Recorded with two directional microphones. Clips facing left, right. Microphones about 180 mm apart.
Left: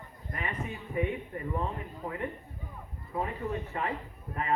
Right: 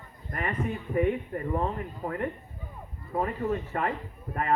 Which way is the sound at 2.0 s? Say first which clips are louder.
Right 4 dB; 55° right (ahead or behind).